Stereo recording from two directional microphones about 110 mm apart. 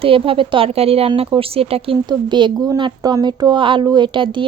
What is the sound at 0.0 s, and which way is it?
Speech, 55° right (ahead or behind).